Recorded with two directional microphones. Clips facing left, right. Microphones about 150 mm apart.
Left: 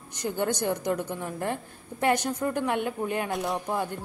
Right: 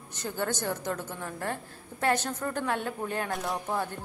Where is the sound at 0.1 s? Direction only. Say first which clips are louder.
Left 4 dB; 15° left (ahead or behind).